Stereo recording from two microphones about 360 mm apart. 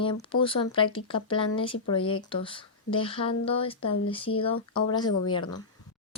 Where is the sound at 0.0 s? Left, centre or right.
Centre.